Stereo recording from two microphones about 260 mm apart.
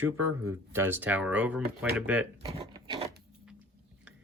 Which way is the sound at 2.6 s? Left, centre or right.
Centre.